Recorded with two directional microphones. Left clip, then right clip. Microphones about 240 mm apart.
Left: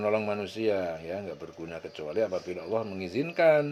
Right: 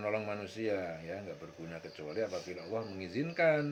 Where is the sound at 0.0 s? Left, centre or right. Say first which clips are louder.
Left 8 dB; left.